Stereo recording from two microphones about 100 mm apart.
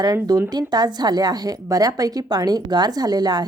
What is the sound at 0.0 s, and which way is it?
A woman's voice, 40° right (ahead or behind).